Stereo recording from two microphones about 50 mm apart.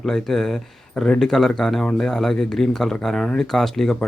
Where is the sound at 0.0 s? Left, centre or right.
Centre.